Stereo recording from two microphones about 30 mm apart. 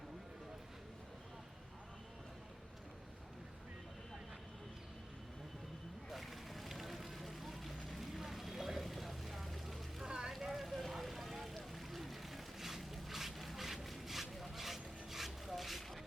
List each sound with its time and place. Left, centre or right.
6.1 s vehicle: centre
10.1 s a sound: right
10.4 s vehicle: centre
10.7 s vehicle: centre
13.8 s a sound: centre
15.5 s vehicle: centre